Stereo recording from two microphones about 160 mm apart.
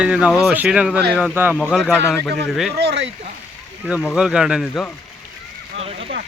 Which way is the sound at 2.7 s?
90° right.